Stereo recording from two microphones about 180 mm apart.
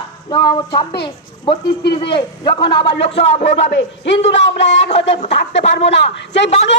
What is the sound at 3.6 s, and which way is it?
A man's voice, 80° left.